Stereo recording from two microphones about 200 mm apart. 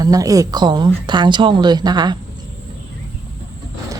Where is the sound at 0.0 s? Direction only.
15° right (ahead or behind).